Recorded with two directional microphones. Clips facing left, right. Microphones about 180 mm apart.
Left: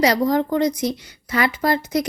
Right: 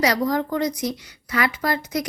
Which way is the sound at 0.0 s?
25° left (ahead or behind).